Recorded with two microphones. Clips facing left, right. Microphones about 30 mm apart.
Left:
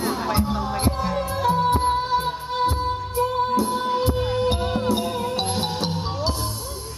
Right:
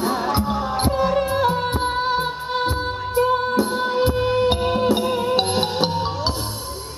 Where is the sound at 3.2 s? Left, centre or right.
Right.